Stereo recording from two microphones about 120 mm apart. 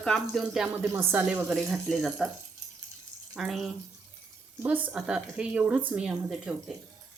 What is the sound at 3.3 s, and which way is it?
Speech, 5° right (ahead or behind).